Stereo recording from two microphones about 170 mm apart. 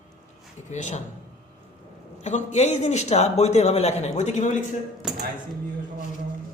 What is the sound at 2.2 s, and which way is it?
A man's voice, 45° left (ahead or behind).